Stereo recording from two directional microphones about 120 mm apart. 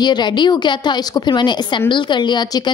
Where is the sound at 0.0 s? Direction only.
35° left (ahead or behind).